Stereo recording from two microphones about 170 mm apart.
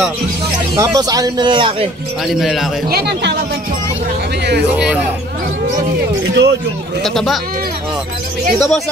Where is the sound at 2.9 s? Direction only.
75° right (ahead or behind).